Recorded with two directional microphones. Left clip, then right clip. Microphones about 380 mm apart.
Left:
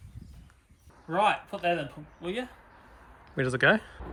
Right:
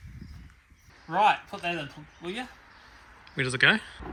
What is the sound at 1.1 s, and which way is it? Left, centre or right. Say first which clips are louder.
Speech: right 3 dB; centre.